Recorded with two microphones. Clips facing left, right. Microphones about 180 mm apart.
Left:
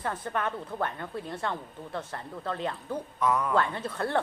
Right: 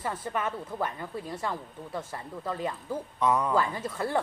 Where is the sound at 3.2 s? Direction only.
20° right (ahead or behind).